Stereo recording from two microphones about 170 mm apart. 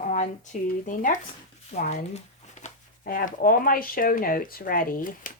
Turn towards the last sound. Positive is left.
turn(degrees=55)  # may be behind; listen again after turning